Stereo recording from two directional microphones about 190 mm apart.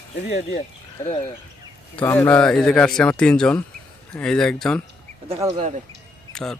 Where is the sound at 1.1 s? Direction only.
30° left (ahead or behind).